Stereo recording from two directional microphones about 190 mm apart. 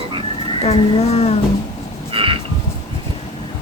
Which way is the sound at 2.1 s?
30° right (ahead or behind).